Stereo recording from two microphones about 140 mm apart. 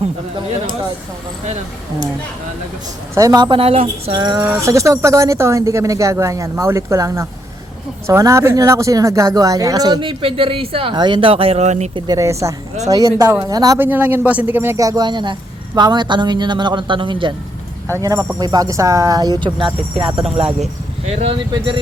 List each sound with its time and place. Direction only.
3.2 s speech: 25° right (ahead or behind)
3.6 s a sound: 45° right (ahead or behind)
4.4 s speech: 20° right (ahead or behind); by 11.9 s 55° right (ahead or behind)
11.9 s speech: 30° right (ahead or behind)
13.7 s speech: 15° right (ahead or behind); by 17.3 s 35° right (ahead or behind)
17.9 s speech: 25° right (ahead or behind)
20.0 s a sound: 45° right (ahead or behind)
21.2 s speech: 35° right (ahead or behind)